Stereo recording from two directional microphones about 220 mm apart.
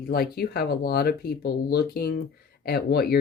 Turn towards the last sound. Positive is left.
turn(degrees=45)  # may be behind; listen again after turning